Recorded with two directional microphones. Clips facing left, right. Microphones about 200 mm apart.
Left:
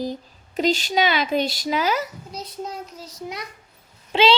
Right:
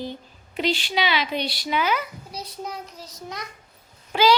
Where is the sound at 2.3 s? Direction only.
20° left (ahead or behind).